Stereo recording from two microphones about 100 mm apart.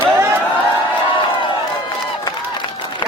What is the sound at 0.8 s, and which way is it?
Crowd, 55° left (ahead or behind).